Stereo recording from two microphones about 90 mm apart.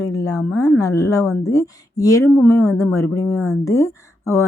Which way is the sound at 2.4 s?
25° left (ahead or behind).